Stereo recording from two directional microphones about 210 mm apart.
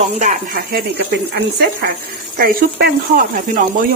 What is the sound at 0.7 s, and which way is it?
Speech, 50° right (ahead or behind).